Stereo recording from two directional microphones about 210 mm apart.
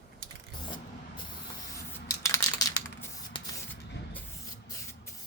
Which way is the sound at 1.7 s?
15° left (ahead or behind).